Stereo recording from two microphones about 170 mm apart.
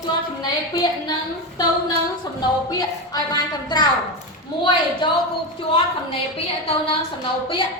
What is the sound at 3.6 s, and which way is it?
A woman's voice, 25° left (ahead or behind).